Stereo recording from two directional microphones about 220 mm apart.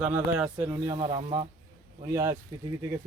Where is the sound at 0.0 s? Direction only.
5° right (ahead or behind).